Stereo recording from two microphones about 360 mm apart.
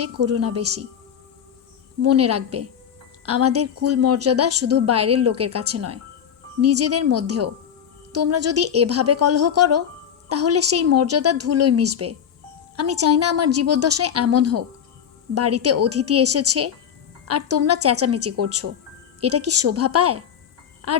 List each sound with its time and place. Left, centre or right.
0.0 s a woman's voice: right
2.0 s a woman's voice: right